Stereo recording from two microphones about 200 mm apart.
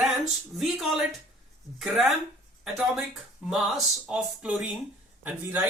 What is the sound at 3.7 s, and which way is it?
Speech, centre (ahead or behind).